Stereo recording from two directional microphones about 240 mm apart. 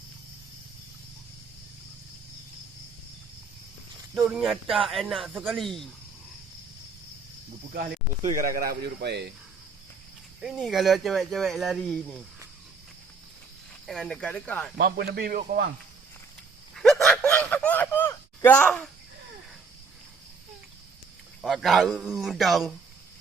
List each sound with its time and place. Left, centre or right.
4.1 s speech: centre
7.7 s speech: right
10.4 s speech: centre
13.8 s speech: centre
14.8 s speech: right
16.7 s a sound: centre
21.4 s speech: centre